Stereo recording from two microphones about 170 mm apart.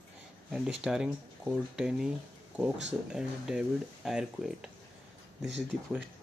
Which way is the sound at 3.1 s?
5° right (ahead or behind).